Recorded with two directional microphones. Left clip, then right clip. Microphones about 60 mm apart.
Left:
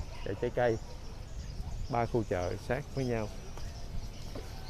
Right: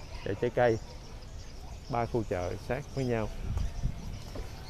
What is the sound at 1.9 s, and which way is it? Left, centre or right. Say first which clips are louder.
Speech: even; centre.